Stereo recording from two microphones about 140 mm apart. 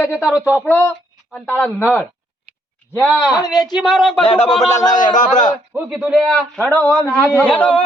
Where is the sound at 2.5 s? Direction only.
90° left.